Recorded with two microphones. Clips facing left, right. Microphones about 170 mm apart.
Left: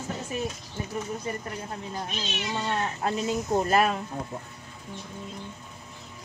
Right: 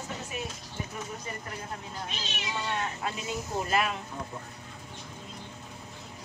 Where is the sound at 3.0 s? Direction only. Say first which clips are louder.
Left 7 dB; 40° left (ahead or behind).